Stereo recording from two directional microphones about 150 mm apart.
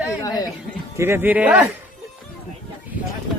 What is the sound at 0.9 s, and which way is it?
Speech, 15° right (ahead or behind).